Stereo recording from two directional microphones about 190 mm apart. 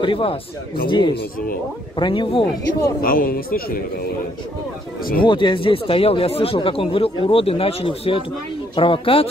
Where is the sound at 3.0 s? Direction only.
50° left (ahead or behind).